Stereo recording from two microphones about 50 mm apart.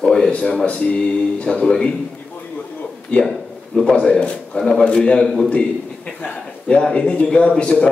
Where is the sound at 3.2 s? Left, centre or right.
Centre.